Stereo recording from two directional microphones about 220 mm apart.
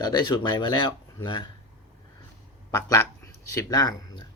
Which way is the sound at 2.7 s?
15° left (ahead or behind).